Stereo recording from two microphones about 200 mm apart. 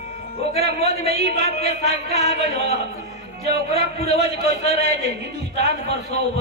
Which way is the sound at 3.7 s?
30° left (ahead or behind).